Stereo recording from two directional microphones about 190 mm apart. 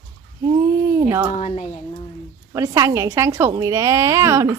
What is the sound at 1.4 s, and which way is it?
Speech, 35° left (ahead or behind).